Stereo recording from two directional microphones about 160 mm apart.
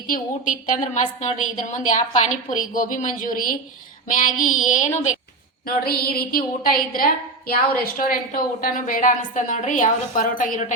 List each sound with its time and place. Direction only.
0.1 s a woman's voice: 55° left (ahead or behind)
5.6 s a woman's voice: 70° left (ahead or behind); by 10.8 s 55° left (ahead or behind)